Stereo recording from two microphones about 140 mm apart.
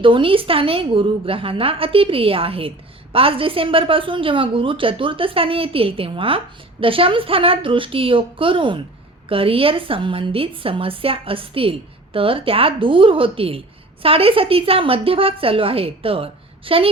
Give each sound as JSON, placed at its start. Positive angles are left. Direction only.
{"t": 0.0, "sound": "a woman's voice", "side_deg": -40}